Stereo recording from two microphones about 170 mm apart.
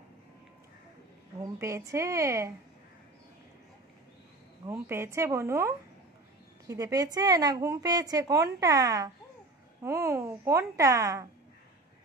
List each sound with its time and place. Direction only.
1.4 s a woman's voice: 20° right (ahead or behind)
4.6 s a woman's voice: 15° right (ahead or behind)